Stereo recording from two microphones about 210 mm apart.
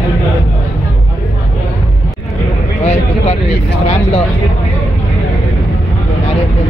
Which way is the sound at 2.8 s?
30° left (ahead or behind).